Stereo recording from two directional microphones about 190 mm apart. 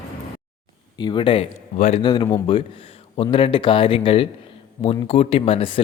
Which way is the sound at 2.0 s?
25° left (ahead or behind).